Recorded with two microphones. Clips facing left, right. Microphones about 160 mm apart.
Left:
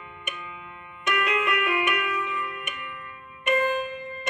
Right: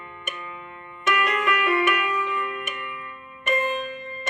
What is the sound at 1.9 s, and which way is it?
Music, 65° right (ahead or behind).